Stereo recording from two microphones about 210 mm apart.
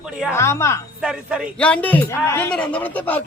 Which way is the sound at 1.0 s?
5° right (ahead or behind).